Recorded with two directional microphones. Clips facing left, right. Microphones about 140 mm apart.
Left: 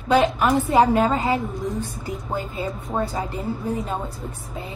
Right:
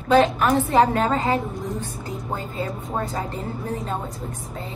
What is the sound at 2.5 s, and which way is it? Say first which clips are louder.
A woman's voice: left 1 dB; 10° left (ahead or behind).